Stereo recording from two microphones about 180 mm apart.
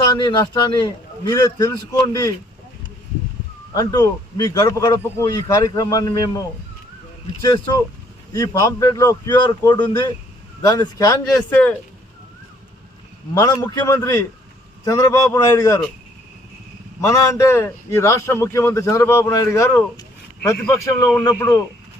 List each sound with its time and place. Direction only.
0.0 s a man's voice: 25° left (ahead or behind)
3.8 s a man's voice: 20° left (ahead or behind)
7.4 s a man's voice: 25° left (ahead or behind)
11.3 s a man's voice: 5° left (ahead or behind)
13.3 s a man's voice: 20° left (ahead or behind)
17.0 s a man's voice: 15° left (ahead or behind)